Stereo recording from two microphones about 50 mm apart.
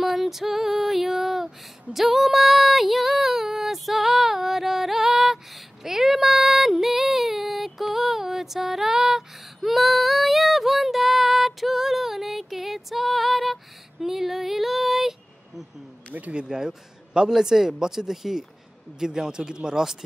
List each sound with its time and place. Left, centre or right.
0.0 s a sound: centre
16.1 s speech: right
16.3 s a man's voice: centre